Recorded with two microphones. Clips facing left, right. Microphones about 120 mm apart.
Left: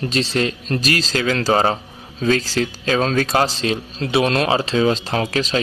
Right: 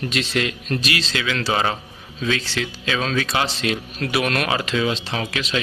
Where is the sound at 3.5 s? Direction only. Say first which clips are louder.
Left 2 dB; 30° left (ahead or behind).